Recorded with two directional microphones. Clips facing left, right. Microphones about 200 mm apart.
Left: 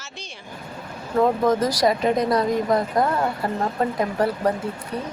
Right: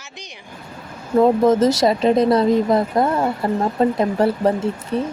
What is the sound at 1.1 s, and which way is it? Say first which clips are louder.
Speech: right 5 dB; 25° right (ahead or behind).